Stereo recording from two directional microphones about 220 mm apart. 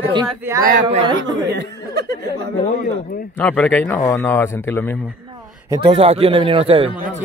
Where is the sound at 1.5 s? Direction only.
50° right (ahead or behind).